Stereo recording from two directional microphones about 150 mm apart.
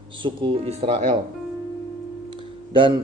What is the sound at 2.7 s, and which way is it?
Speech, 35° right (ahead or behind).